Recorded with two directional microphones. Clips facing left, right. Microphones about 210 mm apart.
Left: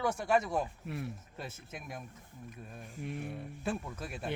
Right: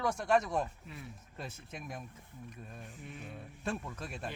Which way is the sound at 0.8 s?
70° left (ahead or behind).